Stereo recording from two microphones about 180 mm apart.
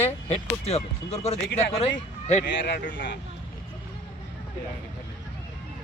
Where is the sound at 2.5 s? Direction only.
65° left (ahead or behind).